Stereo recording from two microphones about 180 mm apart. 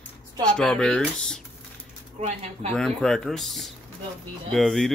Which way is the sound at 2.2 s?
35° right (ahead or behind).